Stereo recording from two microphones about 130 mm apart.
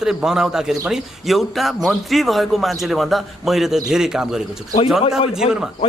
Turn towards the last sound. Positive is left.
turn(degrees=-5)  # may be behind; listen again after turning